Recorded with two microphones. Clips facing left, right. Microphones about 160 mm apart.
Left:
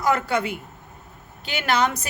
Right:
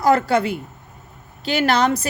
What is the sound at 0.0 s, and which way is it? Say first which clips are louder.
Speech: right 6 dB; 35° right (ahead or behind).